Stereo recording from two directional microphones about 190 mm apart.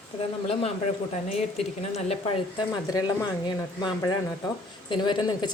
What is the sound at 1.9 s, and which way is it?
Speech, 35° left (ahead or behind).